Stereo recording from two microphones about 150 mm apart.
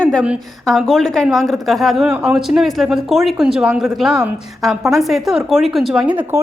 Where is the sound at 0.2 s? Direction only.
5° right (ahead or behind).